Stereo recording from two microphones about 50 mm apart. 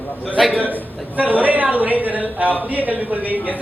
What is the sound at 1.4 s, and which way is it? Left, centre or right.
Speech, right.